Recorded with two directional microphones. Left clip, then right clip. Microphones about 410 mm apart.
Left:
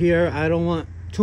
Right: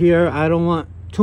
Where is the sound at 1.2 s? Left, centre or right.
Right.